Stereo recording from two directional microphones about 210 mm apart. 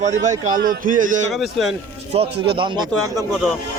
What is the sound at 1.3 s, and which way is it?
Speech, centre (ahead or behind).